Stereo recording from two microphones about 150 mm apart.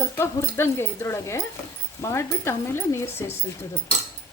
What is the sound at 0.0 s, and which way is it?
Speech, 15° left (ahead or behind).